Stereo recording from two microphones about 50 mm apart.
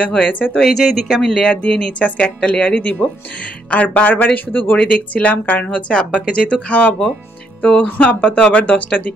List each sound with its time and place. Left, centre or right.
0.0 s speech: left
0.6 s speech: centre
2.7 s speech: left
4.8 s speech: left